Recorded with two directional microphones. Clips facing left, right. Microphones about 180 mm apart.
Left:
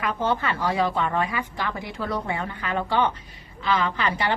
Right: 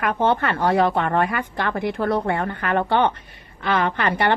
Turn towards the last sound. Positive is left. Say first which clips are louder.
# right 4 dB
turn(degrees=-60)  # may be behind; listen again after turning